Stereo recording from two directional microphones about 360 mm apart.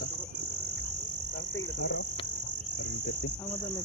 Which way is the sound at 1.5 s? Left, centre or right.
Left.